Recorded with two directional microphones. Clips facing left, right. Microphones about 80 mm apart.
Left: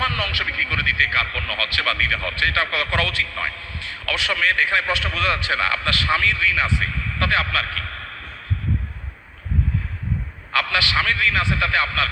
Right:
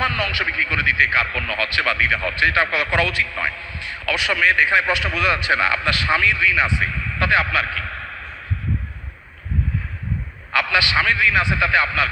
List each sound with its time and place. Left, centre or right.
0.0 s a man's voice: right
10.5 s a man's voice: right